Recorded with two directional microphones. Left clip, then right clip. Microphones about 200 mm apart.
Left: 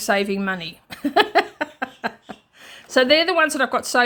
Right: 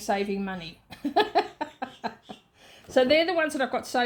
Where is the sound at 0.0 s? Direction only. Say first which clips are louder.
Left 7 dB; 35° left (ahead or behind).